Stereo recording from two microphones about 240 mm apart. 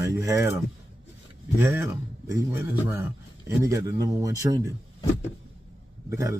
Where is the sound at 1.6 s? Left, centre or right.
Centre.